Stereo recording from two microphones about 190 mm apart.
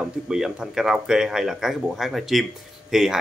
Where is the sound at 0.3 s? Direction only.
5° right (ahead or behind).